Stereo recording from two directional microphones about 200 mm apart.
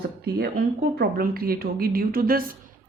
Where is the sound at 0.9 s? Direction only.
50° right (ahead or behind).